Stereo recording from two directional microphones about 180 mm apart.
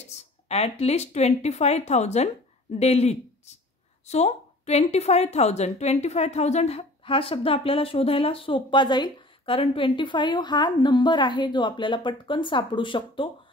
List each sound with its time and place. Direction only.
0.5 s a woman's voice: 35° left (ahead or behind)